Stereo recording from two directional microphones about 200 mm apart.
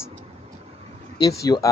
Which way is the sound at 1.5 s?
15° left (ahead or behind).